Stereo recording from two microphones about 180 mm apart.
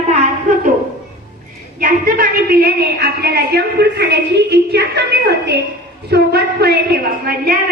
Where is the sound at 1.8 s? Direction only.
55° right (ahead or behind).